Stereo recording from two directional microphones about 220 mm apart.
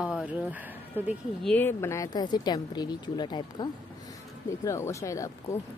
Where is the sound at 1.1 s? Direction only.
5° left (ahead or behind).